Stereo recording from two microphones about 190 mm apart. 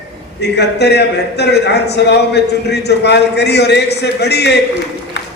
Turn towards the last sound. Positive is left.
turn(degrees=65)  # may be behind; listen again after turning